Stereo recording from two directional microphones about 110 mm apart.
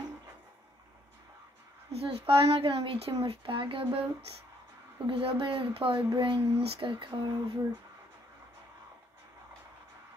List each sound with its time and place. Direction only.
1.9 s a child's voice: 65° right (ahead or behind)
5.0 s speech: 50° right (ahead or behind)